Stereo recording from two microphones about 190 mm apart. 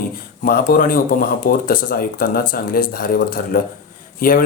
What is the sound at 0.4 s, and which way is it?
Speech, 50° left (ahead or behind).